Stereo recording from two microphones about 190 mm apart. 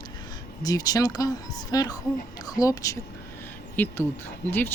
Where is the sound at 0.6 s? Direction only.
20° left (ahead or behind).